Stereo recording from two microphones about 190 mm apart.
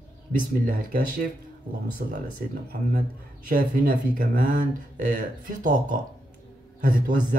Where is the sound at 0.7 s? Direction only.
50° right (ahead or behind).